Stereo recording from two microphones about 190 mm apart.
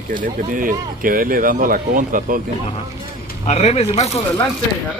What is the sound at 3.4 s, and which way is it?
Speech, 35° left (ahead or behind).